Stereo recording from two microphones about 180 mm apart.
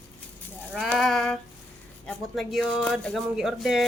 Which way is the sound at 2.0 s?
Centre (ahead or behind).